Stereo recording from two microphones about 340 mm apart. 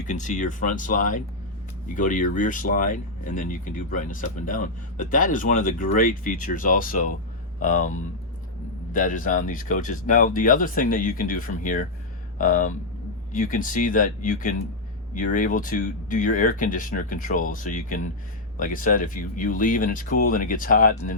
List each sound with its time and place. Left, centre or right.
0.1 s speech: left